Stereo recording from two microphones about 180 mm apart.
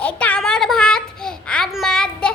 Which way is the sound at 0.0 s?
5° left (ahead or behind).